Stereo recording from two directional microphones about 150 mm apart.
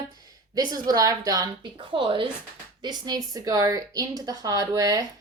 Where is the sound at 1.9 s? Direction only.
35° right (ahead or behind).